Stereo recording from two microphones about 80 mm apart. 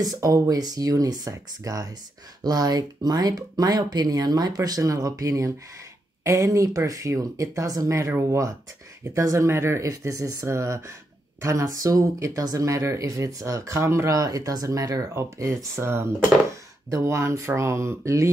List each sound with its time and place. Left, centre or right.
0.0 s speech: right
8.1 s speech: right